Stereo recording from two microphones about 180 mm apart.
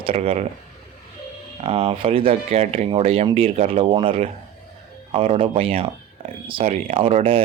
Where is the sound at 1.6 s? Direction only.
30° right (ahead or behind).